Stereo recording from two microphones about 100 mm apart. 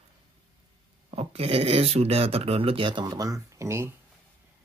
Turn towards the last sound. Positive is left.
turn(degrees=-30)  # may be behind; listen again after turning